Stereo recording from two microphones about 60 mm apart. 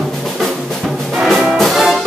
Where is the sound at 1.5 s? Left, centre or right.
Centre.